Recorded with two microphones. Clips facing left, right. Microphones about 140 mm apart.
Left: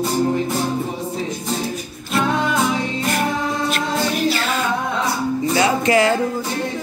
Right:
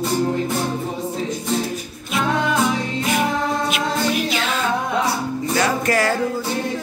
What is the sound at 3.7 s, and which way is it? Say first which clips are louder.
A capella: even; 5° right (ahead or behind).